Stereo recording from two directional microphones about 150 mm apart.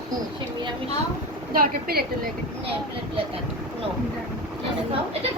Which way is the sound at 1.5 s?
80° right.